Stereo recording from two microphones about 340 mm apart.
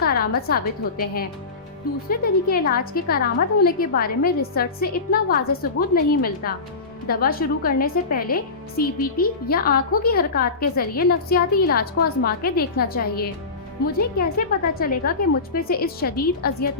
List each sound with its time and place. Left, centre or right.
0.0 s a woman's voice: left